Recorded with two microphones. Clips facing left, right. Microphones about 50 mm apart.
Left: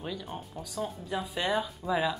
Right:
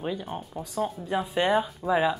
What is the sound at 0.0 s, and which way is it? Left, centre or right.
Speech, right.